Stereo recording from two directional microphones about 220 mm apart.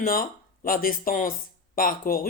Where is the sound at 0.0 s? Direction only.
40° left (ahead or behind).